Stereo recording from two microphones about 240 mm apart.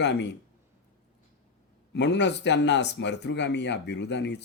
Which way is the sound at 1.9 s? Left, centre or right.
Left.